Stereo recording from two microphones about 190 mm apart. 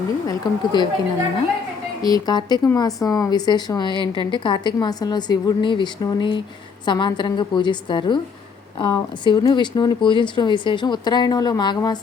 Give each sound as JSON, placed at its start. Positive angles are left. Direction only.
{"t": 0.3, "sound": "speech", "side_deg": 25}
{"t": 2.0, "sound": "speech", "side_deg": 20}